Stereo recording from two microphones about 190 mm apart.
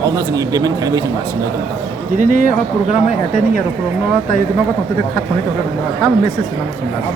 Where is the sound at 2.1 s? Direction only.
45° right (ahead or behind).